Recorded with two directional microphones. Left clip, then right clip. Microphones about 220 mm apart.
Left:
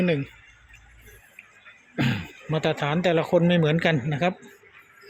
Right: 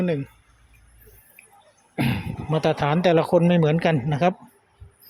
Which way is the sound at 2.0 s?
10° right (ahead or behind).